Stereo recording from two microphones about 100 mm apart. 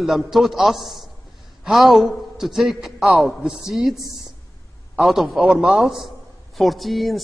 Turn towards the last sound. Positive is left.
turn(degrees=0)  # may be behind; listen again after turning